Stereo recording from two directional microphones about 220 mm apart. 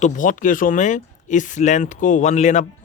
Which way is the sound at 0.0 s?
35° left (ahead or behind).